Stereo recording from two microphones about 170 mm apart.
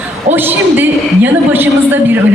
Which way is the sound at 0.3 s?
10° right (ahead or behind).